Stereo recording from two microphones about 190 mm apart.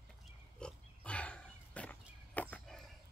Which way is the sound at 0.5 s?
5° left (ahead or behind).